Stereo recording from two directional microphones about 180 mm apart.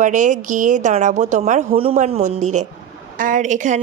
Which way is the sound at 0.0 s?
45° right (ahead or behind).